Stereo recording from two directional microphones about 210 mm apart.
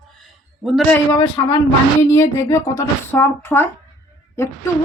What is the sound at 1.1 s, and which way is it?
Speech, 25° left (ahead or behind).